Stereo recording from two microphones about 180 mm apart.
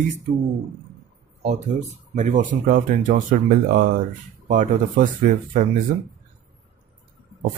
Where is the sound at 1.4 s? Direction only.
40° right (ahead or behind).